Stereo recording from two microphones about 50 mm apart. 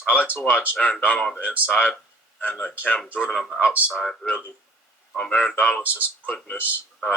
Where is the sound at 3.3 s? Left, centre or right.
Centre.